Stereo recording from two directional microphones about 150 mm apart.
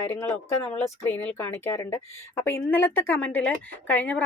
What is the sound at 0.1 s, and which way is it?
Speech, 15° left (ahead or behind).